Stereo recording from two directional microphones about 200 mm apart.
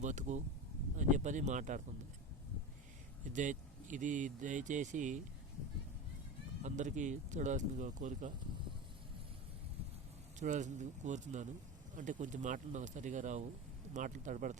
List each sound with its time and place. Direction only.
0.0 s speech: 35° right (ahead or behind)
3.3 s speech: 40° right (ahead or behind)
6.6 s speech: 35° right (ahead or behind)
10.4 s speech: 35° right (ahead or behind)